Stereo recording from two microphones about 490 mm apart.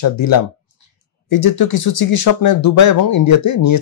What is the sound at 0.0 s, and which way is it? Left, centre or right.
Speech, left.